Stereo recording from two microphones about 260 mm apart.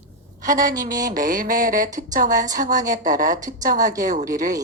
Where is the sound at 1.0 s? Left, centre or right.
Right.